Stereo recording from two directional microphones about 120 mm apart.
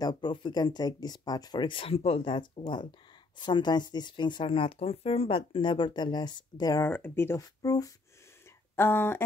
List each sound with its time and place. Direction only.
0.0 s a woman's voice: 40° left (ahead or behind)
6.8 s speech: 15° left (ahead or behind)
7.3 s a woman's voice: 30° left (ahead or behind)
8.7 s speech: 20° left (ahead or behind)